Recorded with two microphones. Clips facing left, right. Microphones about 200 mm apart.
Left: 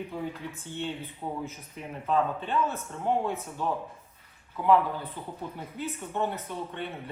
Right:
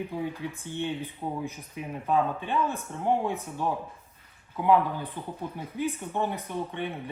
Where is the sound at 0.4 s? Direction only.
15° right (ahead or behind).